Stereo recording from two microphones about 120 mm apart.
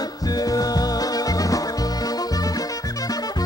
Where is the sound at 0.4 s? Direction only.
30° left (ahead or behind).